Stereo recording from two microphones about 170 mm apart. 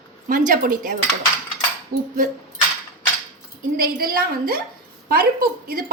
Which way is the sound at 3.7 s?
60° right (ahead or behind).